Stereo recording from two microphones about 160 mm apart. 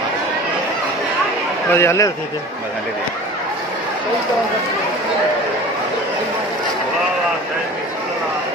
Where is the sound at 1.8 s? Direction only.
20° left (ahead or behind).